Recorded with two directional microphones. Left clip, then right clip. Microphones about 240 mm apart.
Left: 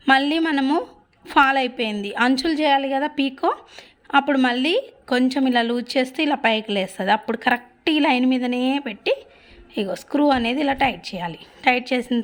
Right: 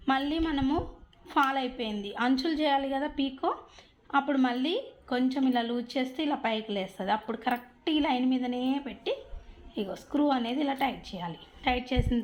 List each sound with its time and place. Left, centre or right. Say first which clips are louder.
0.0 s a woman's voice: left 11 dB; left